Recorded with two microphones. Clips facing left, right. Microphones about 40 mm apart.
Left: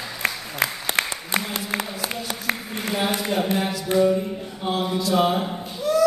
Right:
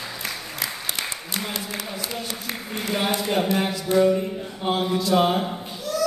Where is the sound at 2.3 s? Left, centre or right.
Left.